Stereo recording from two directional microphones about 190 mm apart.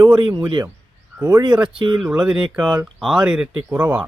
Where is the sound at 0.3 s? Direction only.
20° right (ahead or behind).